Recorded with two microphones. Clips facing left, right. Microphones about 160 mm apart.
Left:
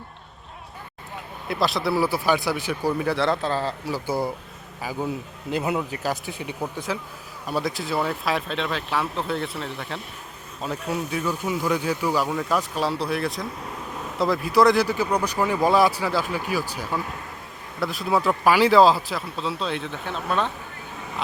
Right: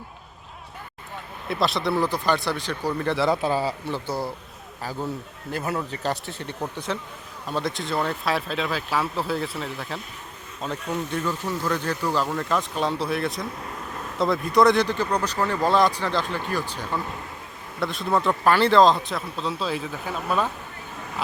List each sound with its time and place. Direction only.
1.5 s a man's voice: centre (ahead or behind)
3.8 s speech: 10° left (ahead or behind)
6.0 s speech: 5° left (ahead or behind)